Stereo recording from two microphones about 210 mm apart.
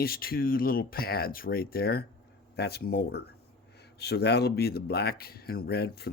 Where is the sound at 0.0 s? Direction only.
45° left (ahead or behind).